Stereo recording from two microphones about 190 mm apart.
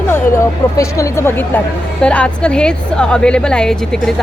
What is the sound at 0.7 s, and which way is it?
Speech, 15° left (ahead or behind).